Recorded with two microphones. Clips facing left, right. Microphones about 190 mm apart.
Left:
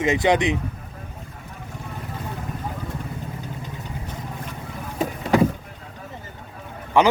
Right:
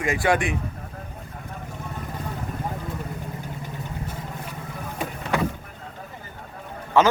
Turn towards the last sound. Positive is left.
turn(degrees=15)  # may be behind; listen again after turning